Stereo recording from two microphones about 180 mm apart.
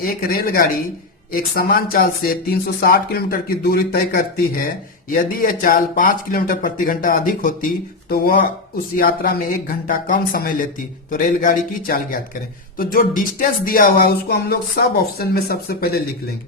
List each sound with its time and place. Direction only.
0.0 s speech: 55° left (ahead or behind)